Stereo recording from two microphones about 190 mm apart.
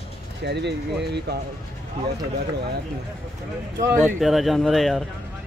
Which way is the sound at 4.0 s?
Centre (ahead or behind).